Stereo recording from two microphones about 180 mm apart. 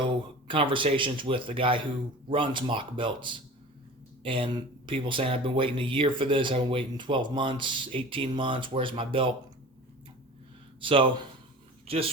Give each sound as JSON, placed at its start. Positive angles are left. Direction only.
{"t": 0.4, "sound": "speech", "side_deg": -30}
{"t": 10.8, "sound": "speech", "side_deg": -30}